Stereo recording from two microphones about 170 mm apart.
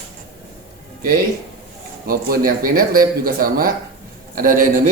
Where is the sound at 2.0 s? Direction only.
60° right (ahead or behind).